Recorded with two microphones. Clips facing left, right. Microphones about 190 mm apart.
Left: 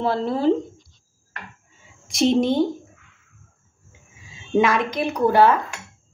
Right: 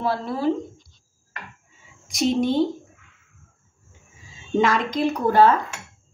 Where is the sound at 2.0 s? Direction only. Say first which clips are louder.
Left 3 dB; 30° left (ahead or behind).